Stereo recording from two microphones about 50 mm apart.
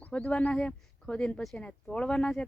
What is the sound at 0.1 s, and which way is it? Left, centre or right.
A woman's voice, left.